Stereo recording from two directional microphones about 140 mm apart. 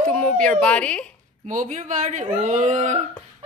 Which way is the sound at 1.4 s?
60° right (ahead or behind).